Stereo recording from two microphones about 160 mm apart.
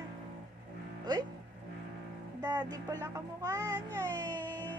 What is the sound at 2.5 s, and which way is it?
Music, 25° right (ahead or behind).